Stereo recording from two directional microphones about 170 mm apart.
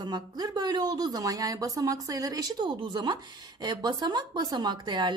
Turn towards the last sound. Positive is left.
turn(degrees=-25)  # may be behind; listen again after turning